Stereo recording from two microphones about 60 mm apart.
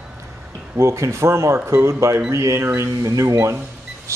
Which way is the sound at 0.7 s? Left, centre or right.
Right.